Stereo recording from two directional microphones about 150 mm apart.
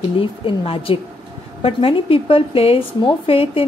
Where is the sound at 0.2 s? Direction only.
35° left (ahead or behind).